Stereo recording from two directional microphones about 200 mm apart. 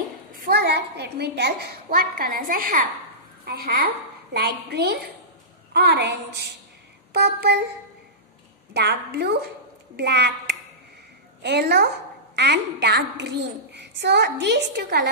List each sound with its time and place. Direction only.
0.3 s a woman's voice: 55° right (ahead or behind)
8.7 s a woman's voice: 55° right (ahead or behind)